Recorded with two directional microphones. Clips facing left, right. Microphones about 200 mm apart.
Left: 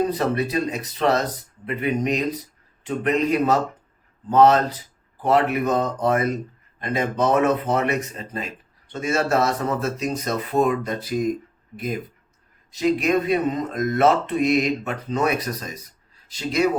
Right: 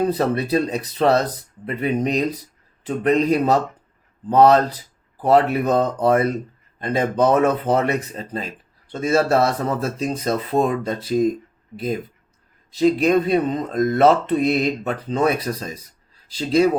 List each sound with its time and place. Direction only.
0.1 s a man's voice: 35° right (ahead or behind)
12.7 s a man's voice: 30° right (ahead or behind)